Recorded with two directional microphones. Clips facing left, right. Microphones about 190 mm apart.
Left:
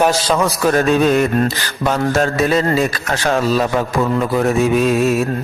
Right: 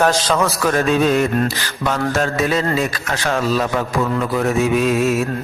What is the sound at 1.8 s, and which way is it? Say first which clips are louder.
A man's voice: left 3 dB; 30° left (ahead or behind).